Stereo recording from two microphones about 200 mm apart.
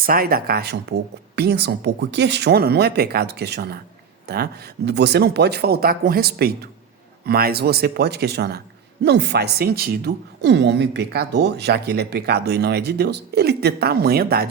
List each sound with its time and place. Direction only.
0.0 s a woman's voice: 45° right (ahead or behind)